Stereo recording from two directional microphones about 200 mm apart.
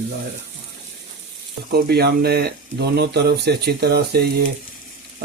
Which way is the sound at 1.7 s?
50° right (ahead or behind).